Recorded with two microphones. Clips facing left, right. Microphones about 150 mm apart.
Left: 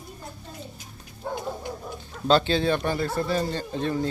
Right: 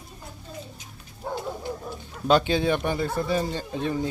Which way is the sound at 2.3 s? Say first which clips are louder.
Even; 15° right (ahead or behind).